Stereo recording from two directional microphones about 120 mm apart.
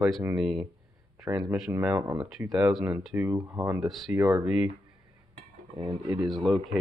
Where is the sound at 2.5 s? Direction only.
5° right (ahead or behind).